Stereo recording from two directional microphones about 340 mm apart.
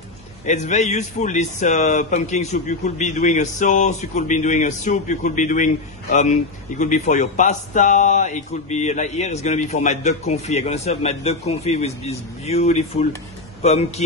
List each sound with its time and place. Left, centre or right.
0.5 s a man's voice: left
6.8 s a man's voice: left